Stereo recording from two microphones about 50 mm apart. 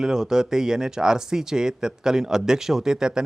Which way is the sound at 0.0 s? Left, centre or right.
Centre.